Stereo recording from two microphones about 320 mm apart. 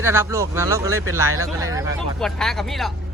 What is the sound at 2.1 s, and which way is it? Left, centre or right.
Speech, centre.